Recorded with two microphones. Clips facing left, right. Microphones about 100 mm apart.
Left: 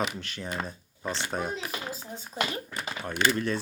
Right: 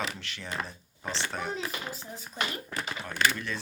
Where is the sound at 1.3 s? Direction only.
25° left (ahead or behind).